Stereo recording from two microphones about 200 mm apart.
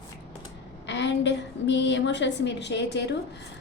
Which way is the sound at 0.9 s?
60° left (ahead or behind).